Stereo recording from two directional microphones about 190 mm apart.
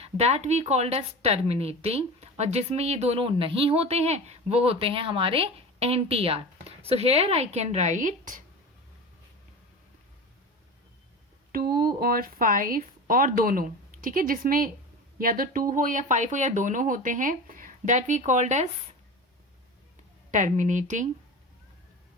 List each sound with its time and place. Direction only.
0.0 s a woman's voice: 35° right (ahead or behind)
11.5 s a woman's voice: 50° right (ahead or behind)
20.3 s a woman's voice: 40° right (ahead or behind)